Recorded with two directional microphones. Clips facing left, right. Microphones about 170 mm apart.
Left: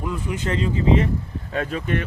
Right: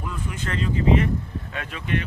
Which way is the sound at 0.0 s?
15° left (ahead or behind).